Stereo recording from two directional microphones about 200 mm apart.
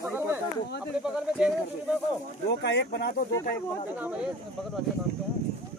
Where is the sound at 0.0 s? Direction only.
10° right (ahead or behind).